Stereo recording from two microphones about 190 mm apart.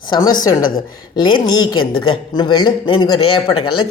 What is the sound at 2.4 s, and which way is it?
Speech, 25° left (ahead or behind).